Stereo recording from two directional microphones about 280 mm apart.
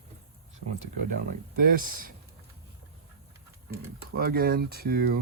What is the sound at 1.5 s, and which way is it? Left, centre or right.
Speech, right.